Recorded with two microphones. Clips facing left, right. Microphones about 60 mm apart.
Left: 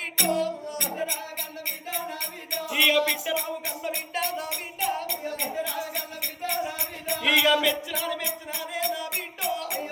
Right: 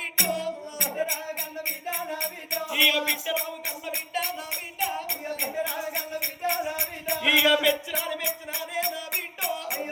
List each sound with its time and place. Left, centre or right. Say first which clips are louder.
0.2 s music: left 3 dB; centre
2.6 s music: left 2 dB; centre
4.8 s music: left 1 dB; centre
5.0 s music: left 1 dB; right